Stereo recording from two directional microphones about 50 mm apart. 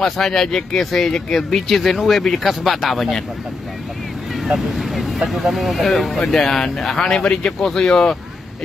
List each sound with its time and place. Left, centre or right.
0.0 s speech: centre
4.5 s speech: centre